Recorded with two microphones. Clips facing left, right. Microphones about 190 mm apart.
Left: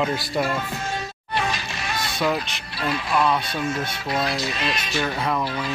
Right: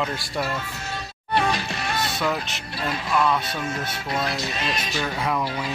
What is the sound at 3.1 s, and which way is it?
Speech, 5° left (ahead or behind).